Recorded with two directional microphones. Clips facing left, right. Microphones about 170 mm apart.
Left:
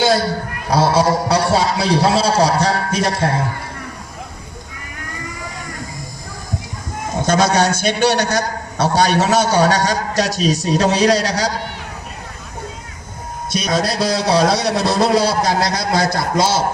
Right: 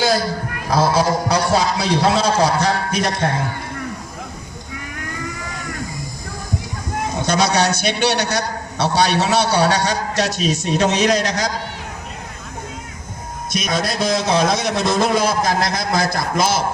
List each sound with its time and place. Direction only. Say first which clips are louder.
0.8 s a man's voice: left 2 dB; 35° left (ahead or behind)
7.3 s a man's voice: left 3 dB; 50° left (ahead or behind)
13.6 s a man's voice: left 3 dB; 35° left (ahead or behind)